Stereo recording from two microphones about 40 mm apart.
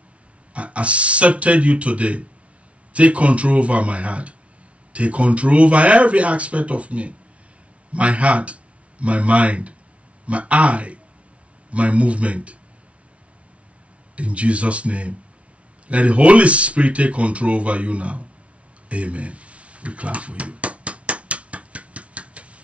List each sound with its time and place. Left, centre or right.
0.5 s speech: right
14.1 s speech: right
18.9 s a sound: right